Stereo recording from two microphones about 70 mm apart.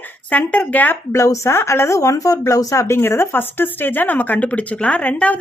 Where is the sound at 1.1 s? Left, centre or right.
Left.